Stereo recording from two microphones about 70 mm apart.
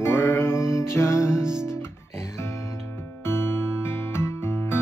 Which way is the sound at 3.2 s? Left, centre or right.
Left.